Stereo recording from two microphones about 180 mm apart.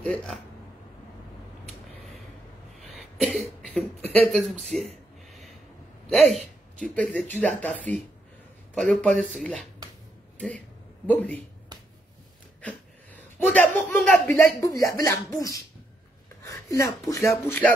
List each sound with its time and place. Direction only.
0.0 s speech: 5° left (ahead or behind)
2.8 s a sound: centre (ahead or behind)
3.6 s speech: 5° left (ahead or behind)
6.3 s speech: centre (ahead or behind)
11.1 s speech: 10° left (ahead or behind)
12.6 s a man's voice: 10° left (ahead or behind)